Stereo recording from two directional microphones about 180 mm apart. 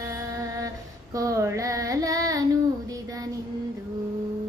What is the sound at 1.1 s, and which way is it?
Child singing, 20° right (ahead or behind).